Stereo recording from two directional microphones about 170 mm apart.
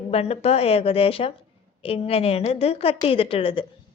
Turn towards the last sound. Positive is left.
turn(degrees=35)  # may be behind; listen again after turning